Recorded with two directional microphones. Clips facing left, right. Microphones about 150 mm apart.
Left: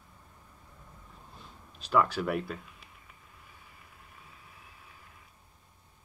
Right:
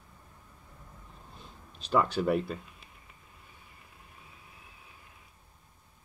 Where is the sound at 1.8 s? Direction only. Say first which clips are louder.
Even; 20° right (ahead or behind).